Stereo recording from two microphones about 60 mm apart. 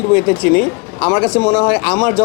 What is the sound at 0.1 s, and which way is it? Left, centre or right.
Speech, left.